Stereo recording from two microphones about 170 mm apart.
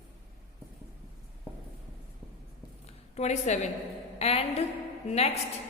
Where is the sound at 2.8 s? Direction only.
40° left (ahead or behind).